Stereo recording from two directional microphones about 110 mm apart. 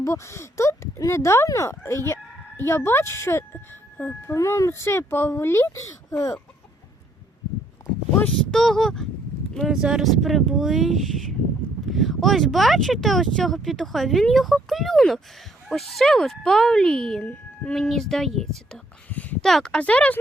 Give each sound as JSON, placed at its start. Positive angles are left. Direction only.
{"t": 0.0, "sound": "speech", "side_deg": 25}
{"t": 8.2, "sound": "speech", "side_deg": 5}
{"t": 19.0, "sound": "a sound", "side_deg": 15}
{"t": 19.5, "sound": "speech", "side_deg": 5}